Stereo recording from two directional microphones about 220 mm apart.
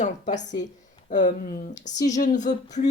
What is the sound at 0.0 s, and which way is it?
Speech, 35° left (ahead or behind).